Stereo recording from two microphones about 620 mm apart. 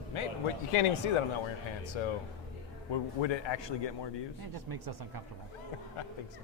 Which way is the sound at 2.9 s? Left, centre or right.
Left.